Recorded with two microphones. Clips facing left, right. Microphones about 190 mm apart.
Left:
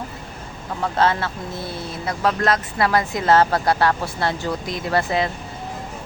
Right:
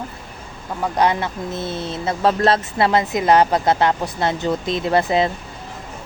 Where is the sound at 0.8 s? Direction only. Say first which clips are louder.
Right 1 dB; 15° right (ahead or behind).